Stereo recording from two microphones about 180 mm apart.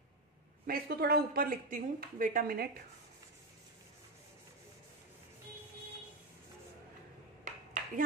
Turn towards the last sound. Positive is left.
turn(degrees=-45)  # may be behind; listen again after turning